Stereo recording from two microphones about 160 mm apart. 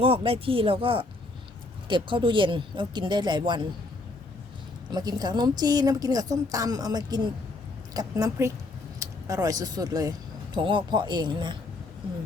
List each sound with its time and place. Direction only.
0.0 s speech: 35° right (ahead or behind)
4.9 s a woman's voice: 25° right (ahead or behind)